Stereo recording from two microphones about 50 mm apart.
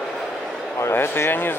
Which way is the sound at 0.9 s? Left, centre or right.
Left.